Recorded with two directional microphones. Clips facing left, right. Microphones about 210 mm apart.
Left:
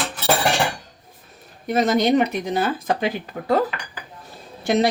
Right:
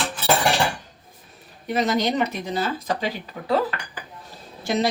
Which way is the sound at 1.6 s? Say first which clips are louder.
Left 4 dB; 45° left (ahead or behind).